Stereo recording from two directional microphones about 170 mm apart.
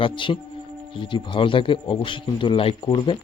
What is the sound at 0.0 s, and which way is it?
A man's voice, 30° left (ahead or behind).